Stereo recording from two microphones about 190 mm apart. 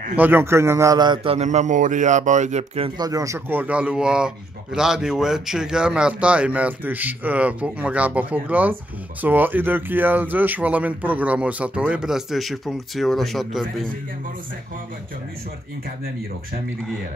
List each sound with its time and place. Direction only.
0.1 s a man's voice: 10° right (ahead or behind); by 2.9 s 35° right (ahead or behind)
3.0 s speech: 20° right (ahead or behind); by 13.8 s centre (ahead or behind)